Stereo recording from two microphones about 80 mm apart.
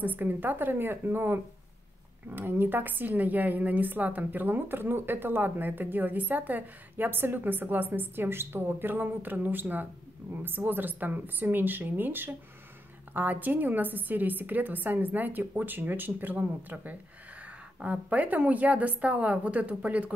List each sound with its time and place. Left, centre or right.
0.0 s a woman's voice: right